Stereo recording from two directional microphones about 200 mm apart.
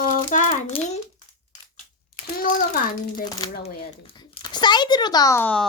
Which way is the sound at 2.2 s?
45° left (ahead or behind).